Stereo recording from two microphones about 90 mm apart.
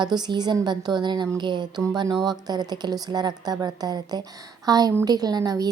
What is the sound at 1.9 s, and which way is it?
A woman's voice, 45° right (ahead or behind).